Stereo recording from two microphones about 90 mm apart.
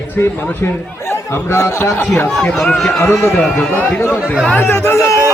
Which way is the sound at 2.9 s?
30° left (ahead or behind).